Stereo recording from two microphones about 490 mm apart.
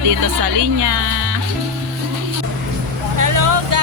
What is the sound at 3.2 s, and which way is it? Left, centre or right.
Vehicle, right.